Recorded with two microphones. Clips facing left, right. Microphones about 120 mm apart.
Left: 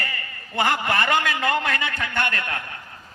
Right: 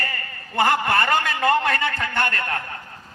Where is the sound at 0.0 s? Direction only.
45° right (ahead or behind).